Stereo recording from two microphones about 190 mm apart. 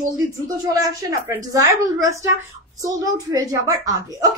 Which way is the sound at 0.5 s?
20° right (ahead or behind).